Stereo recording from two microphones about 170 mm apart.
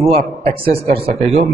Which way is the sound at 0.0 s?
35° right (ahead or behind).